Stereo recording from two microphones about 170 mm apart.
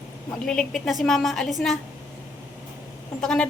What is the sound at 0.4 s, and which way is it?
A woman's voice, centre (ahead or behind).